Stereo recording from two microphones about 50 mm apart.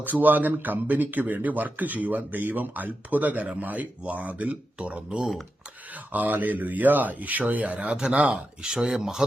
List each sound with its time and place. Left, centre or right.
0.0 s speech: right
6.1 s speech: right; by 9.2 s centre